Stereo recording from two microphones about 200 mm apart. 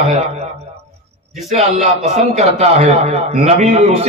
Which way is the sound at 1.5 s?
35° right (ahead or behind).